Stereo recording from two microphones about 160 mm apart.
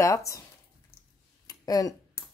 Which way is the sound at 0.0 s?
20° left (ahead or behind).